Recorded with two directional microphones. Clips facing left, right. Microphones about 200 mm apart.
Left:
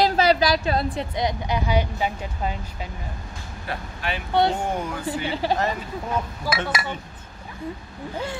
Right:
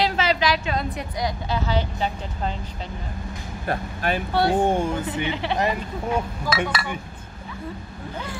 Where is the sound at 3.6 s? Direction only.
45° right (ahead or behind).